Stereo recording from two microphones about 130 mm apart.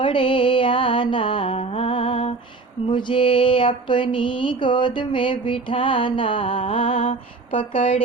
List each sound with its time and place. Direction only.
0.0 s music: 40° left (ahead or behind)
2.9 s mantra: 40° left (ahead or behind)